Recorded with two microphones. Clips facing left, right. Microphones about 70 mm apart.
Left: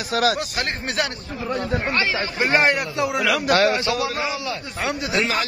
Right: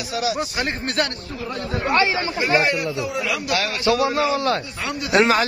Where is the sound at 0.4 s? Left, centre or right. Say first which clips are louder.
Right 2 dB; centre.